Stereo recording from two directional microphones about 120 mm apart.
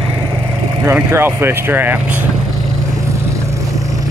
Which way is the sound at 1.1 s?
20° right (ahead or behind).